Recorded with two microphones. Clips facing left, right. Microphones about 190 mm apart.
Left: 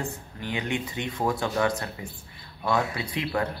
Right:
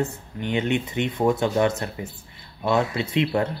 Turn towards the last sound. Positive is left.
turn(degrees=-25)  # may be behind; listen again after turning